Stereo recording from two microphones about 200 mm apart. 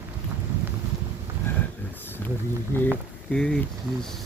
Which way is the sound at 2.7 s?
10° left (ahead or behind).